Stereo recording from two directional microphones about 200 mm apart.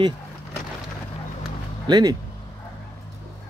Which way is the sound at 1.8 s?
20° right (ahead or behind).